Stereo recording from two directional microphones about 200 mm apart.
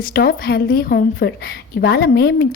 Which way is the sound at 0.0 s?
50° left (ahead or behind).